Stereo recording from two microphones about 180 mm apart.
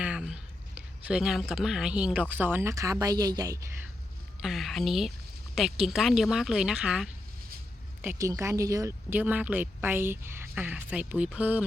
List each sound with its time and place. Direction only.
0.0 s a sound: 5° right (ahead or behind)
0.8 s speech: 5° right (ahead or behind)
4.4 s speech: centre (ahead or behind)
8.0 s speech: 15° right (ahead or behind)